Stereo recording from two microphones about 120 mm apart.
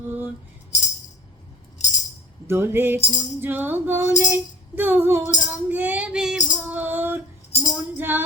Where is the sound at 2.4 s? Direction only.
20° right (ahead or behind).